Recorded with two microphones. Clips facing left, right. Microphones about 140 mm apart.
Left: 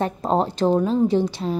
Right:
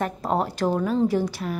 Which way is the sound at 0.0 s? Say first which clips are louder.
Left 3 dB; 25° left (ahead or behind).